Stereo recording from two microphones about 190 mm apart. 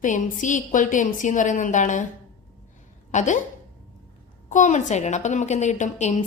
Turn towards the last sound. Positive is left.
turn(degrees=40)  # may be behind; listen again after turning